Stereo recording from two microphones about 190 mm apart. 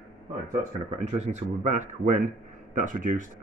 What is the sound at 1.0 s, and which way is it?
Speech, 35° right (ahead or behind).